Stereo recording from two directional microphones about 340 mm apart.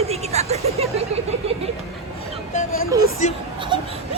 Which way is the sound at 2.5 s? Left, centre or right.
Left.